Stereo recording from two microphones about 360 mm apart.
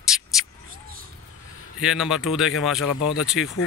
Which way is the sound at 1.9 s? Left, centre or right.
Centre.